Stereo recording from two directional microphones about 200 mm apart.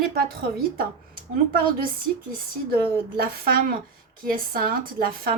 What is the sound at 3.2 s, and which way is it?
A woman's voice, 50° right (ahead or behind).